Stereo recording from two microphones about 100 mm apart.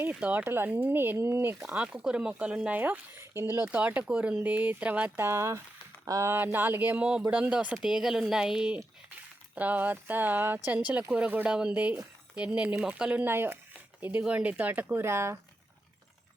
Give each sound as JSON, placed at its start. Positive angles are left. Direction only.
{"t": 0.0, "sound": "speech", "side_deg": -15}
{"t": 1.7, "sound": "speech", "side_deg": -10}
{"t": 5.1, "sound": "speech", "side_deg": -25}